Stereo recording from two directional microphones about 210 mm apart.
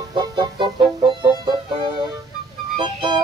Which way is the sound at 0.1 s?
20° right (ahead or behind).